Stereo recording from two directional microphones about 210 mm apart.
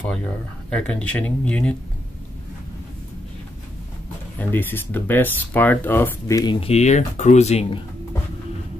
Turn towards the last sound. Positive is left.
turn(degrees=30)  # may be behind; listen again after turning